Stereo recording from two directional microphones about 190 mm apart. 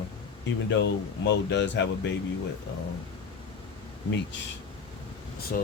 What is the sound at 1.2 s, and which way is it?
Speech, 65° left (ahead or behind).